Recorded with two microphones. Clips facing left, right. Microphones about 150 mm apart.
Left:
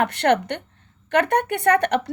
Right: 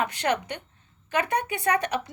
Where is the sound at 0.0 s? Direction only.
60° left (ahead or behind).